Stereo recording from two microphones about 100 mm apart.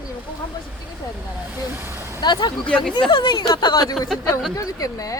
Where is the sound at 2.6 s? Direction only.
10° left (ahead or behind).